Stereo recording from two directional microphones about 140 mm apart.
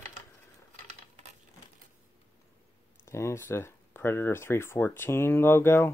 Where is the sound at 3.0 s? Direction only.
20° left (ahead or behind).